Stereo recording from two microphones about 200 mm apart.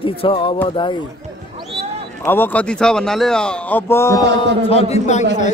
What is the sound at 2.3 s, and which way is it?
A man's voice, 10° left (ahead or behind).